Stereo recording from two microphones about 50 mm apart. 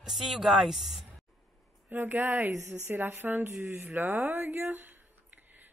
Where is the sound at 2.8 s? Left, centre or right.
Right.